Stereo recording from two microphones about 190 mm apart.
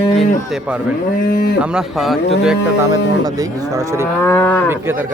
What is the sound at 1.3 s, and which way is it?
Speech, 55° left (ahead or behind).